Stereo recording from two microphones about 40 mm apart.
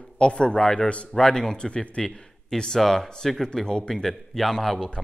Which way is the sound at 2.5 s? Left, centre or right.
Centre.